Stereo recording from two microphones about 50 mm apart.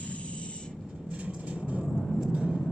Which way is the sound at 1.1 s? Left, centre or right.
Right.